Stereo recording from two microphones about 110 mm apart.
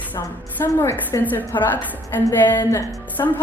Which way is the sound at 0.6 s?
25° left (ahead or behind).